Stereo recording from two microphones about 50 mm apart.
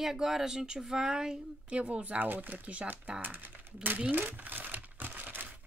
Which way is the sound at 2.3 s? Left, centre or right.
Right.